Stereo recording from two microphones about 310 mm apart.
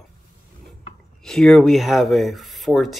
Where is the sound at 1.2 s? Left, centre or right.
Centre.